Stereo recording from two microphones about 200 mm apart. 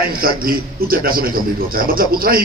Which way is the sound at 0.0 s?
45° right (ahead or behind).